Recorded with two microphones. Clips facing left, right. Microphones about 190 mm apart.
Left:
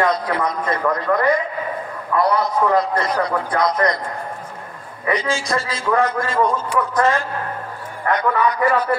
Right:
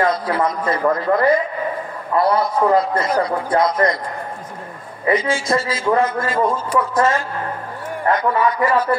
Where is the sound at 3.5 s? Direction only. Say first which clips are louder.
Right 3 dB; 25° right (ahead or behind).